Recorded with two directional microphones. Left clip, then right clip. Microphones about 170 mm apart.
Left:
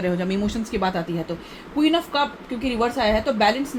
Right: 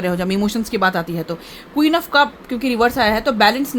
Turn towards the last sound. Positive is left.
turn(degrees=-50)  # may be behind; listen again after turning